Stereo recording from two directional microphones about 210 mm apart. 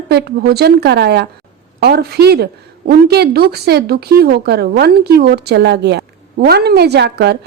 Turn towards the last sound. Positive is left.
turn(degrees=-50)  # may be behind; listen again after turning